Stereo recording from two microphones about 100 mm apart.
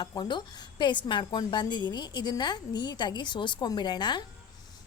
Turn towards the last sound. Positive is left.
turn(degrees=45)  # may be behind; listen again after turning